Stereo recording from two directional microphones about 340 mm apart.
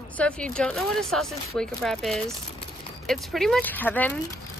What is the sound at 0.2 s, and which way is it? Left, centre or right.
Speech, centre.